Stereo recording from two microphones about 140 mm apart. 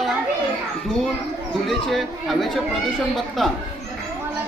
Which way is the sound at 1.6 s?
Centre (ahead or behind).